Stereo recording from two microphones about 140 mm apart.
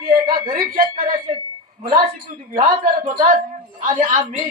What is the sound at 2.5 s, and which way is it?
A woman's voice, 75° right (ahead or behind).